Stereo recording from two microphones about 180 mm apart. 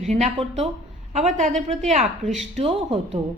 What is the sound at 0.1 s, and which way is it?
A woman's voice, 35° right (ahead or behind).